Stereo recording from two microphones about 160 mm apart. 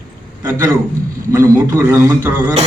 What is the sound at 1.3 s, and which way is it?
A man's voice, 15° right (ahead or behind).